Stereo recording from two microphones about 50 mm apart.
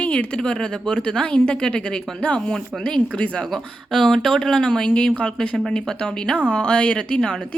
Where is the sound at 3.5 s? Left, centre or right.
Centre.